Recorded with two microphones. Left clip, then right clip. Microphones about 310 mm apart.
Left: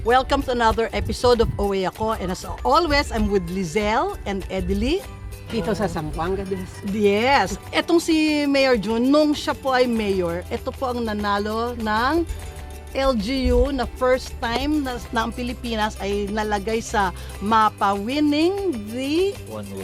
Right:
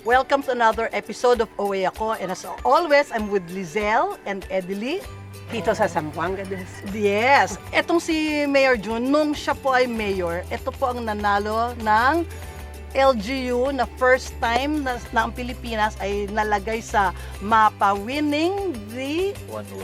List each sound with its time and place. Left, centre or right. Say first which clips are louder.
0.0 s speech: even; left
5.7 s speech: right 3 dB; right
6.9 s speech: even; left